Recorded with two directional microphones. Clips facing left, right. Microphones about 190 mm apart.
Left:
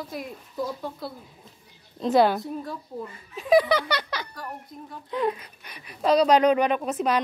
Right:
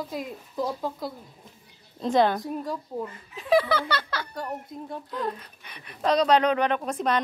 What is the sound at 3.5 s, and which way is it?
Speech, 15° left (ahead or behind).